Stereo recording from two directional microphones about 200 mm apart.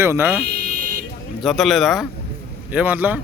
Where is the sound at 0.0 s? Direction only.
10° right (ahead or behind).